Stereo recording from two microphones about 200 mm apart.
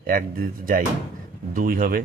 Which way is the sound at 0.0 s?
45° right (ahead or behind).